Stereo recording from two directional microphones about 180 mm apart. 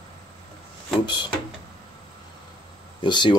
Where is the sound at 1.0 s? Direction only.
25° left (ahead or behind).